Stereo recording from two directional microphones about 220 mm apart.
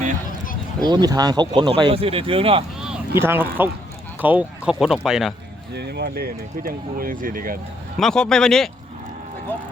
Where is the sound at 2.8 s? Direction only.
5° right (ahead or behind).